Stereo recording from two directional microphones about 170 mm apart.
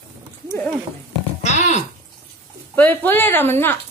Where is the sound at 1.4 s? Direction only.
40° left (ahead or behind).